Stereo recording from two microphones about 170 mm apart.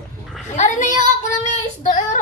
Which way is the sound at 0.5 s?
45° left (ahead or behind).